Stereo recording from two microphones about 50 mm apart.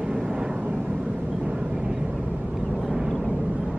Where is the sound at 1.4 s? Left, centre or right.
Centre.